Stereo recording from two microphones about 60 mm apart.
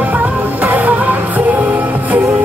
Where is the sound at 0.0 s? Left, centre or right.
Right.